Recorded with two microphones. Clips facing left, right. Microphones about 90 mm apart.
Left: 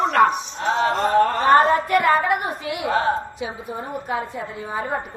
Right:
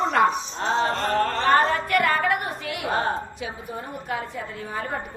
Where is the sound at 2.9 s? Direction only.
35° right (ahead or behind).